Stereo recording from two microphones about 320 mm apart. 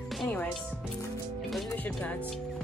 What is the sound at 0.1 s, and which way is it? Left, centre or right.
Music, centre.